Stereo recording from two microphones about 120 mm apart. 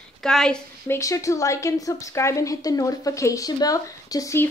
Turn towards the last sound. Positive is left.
turn(degrees=30)  # may be behind; listen again after turning